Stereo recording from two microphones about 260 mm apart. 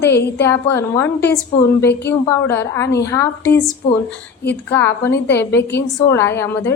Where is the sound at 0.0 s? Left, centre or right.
Left.